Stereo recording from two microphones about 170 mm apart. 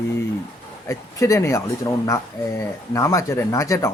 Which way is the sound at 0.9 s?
20° left (ahead or behind).